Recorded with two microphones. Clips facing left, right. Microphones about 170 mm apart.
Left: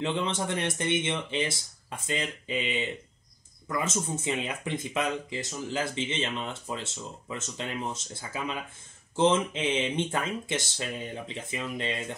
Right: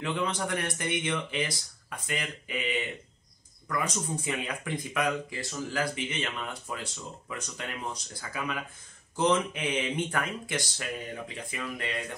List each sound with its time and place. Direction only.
0.0 s speech: 25° left (ahead or behind)